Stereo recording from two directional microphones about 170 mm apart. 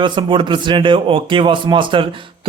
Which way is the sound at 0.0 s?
30° right (ahead or behind).